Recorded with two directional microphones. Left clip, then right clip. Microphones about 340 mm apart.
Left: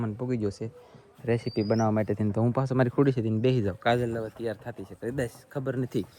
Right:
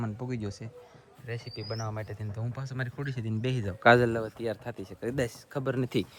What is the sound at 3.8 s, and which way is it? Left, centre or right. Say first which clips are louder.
Speech: right 7 dB; right.